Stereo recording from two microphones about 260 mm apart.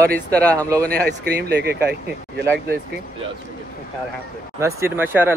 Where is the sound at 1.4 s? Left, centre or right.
Right.